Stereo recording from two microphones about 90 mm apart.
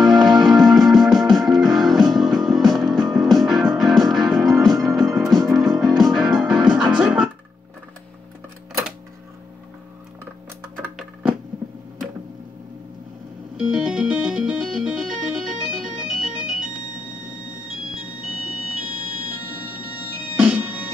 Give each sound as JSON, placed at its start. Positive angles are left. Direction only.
{"t": 0.0, "sound": "music", "side_deg": 0}
{"t": 13.7, "sound": "music", "side_deg": -10}
{"t": 20.2, "sound": "music", "side_deg": -15}